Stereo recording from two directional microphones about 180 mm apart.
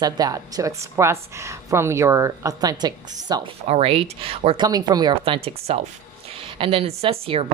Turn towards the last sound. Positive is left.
turn(degrees=-30)  # may be behind; listen again after turning